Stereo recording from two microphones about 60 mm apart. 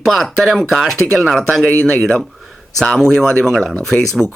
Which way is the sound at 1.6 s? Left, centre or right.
Left.